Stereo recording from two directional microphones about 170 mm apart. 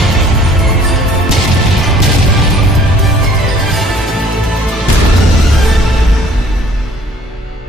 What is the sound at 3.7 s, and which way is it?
Music, centre (ahead or behind).